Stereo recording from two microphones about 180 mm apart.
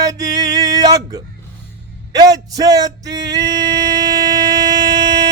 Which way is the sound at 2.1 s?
20° right (ahead or behind).